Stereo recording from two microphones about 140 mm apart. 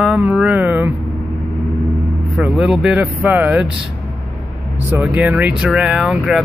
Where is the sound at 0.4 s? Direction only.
10° right (ahead or behind).